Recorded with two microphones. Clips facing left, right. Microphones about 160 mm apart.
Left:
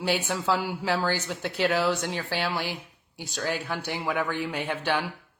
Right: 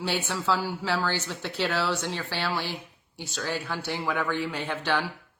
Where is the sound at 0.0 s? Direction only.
10° left (ahead or behind).